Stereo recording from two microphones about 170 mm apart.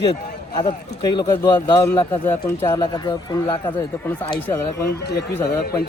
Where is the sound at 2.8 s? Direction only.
25° left (ahead or behind).